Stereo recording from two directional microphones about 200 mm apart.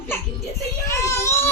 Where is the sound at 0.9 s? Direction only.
15° left (ahead or behind).